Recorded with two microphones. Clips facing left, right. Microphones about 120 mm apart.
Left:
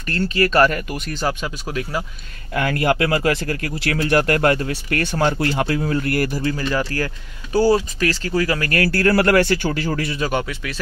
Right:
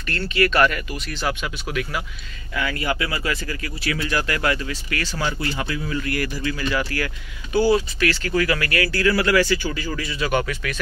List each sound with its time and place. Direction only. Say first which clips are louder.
0.3 s speech: left 2 dB; 40° left (ahead or behind)
2.5 s speech: left 6 dB; 55° left (ahead or behind)
10.4 s speech: right 1 dB; 20° left (ahead or behind)